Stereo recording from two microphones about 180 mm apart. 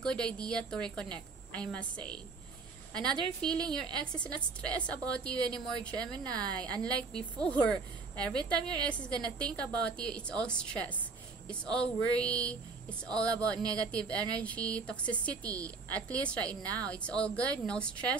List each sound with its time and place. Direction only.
0.0 s a woman's voice: 5° left (ahead or behind)
13.3 s speech: 20° right (ahead or behind)
13.9 s a woman's voice: 5° left (ahead or behind)